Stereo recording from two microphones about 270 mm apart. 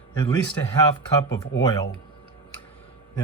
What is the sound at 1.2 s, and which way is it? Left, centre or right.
Speech, left.